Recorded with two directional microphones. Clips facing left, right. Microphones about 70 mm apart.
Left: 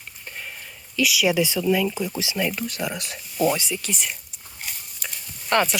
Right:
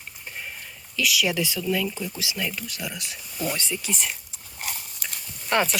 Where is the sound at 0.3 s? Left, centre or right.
Centre.